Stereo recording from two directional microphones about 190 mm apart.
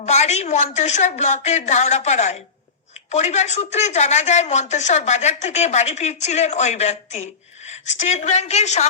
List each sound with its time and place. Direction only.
0.0 s speech: 35° left (ahead or behind)